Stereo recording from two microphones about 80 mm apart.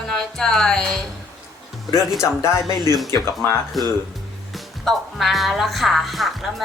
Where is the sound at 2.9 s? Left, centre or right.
Left.